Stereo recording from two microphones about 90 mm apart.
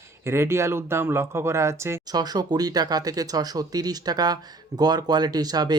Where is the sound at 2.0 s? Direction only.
45° right (ahead or behind).